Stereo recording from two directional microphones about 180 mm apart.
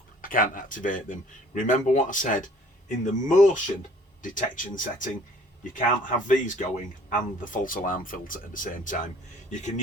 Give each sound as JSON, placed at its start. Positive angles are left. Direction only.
{"t": 0.2, "sound": "speech", "side_deg": 50}